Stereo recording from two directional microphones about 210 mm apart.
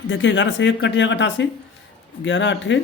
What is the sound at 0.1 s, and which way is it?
Speech, 60° left (ahead or behind).